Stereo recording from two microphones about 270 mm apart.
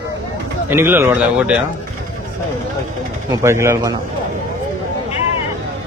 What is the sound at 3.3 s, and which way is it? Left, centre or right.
Speech, centre.